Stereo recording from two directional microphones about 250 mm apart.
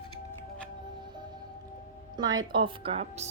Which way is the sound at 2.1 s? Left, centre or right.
Centre.